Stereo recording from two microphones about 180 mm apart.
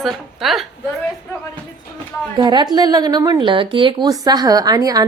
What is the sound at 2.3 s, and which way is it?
A woman's voice, 25° right (ahead or behind).